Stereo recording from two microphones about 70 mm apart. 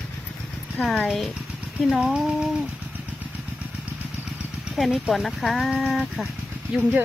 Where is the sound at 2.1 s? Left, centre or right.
Centre.